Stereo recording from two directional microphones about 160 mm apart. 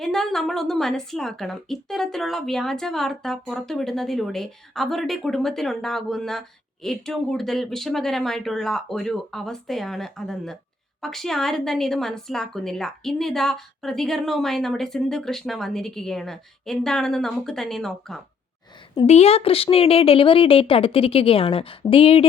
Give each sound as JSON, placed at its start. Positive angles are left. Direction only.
{"t": 0.0, "sound": "a woman's voice", "side_deg": 0}
{"t": 19.0, "sound": "a woman's voice", "side_deg": 40}